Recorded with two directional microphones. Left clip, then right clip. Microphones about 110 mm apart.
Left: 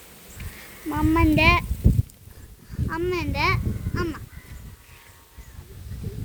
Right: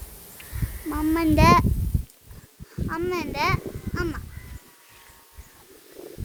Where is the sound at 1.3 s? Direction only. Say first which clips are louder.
Right 4 dB; 15° right (ahead or behind).